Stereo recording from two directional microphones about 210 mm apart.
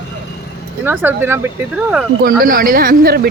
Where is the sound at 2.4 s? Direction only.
40° right (ahead or behind).